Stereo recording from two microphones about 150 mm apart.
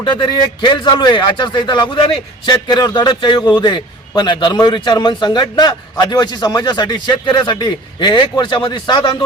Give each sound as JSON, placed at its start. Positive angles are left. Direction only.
{"t": 0.0, "sound": "speech", "side_deg": 30}